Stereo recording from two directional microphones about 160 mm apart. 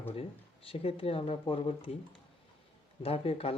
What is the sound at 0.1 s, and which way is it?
Speech, 35° left (ahead or behind).